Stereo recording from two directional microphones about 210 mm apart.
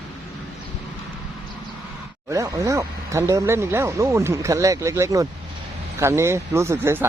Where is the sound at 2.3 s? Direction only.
15° right (ahead or behind).